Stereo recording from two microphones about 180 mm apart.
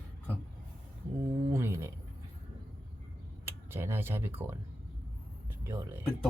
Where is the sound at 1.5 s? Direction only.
15° right (ahead or behind).